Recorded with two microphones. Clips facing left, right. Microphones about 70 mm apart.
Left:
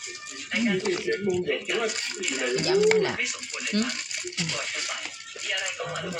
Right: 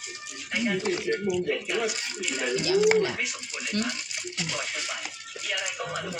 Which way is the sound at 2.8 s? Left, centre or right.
Centre.